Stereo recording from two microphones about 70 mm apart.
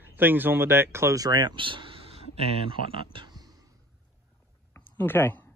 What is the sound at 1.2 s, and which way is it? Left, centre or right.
Speech, right.